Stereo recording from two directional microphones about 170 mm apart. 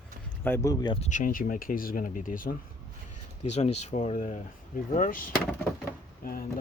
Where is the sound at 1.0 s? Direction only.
50° left (ahead or behind).